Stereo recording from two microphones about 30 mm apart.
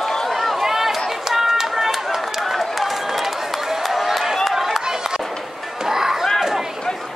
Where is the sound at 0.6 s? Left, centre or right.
Centre.